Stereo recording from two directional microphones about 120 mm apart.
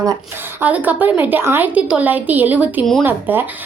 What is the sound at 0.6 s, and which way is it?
Speech, 15° right (ahead or behind).